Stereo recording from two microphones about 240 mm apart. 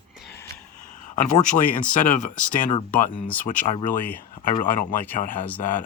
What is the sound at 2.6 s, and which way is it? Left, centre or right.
Speech, left.